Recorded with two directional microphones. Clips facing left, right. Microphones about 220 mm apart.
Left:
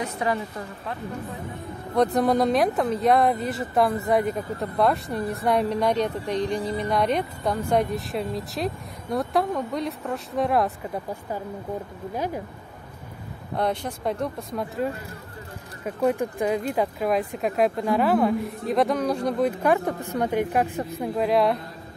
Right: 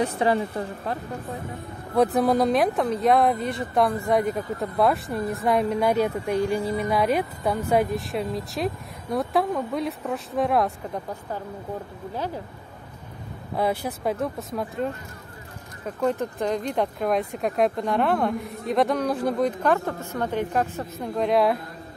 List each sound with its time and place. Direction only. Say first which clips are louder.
0.0 s a woman's voice: right 4 dB; 30° right (ahead or behind)
2.1 s speech: even; centre (ahead or behind)
13.6 s speech: right 1 dB; 5° right (ahead or behind)
15.8 s speech: left 2 dB; 10° left (ahead or behind)
19.6 s a woman's voice: left 1 dB; 15° left (ahead or behind)